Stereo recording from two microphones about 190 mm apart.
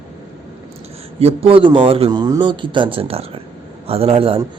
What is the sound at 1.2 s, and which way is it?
A man's voice, 30° right (ahead or behind).